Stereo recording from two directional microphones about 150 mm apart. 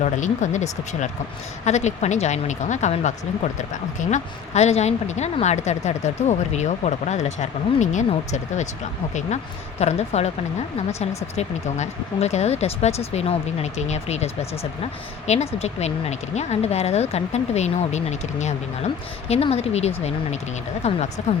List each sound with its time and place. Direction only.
0.0 s speech: 55° left (ahead or behind)
9.8 s speech: 45° left (ahead or behind)
11.3 s speech: 45° left (ahead or behind)
15.3 s speech: 45° left (ahead or behind)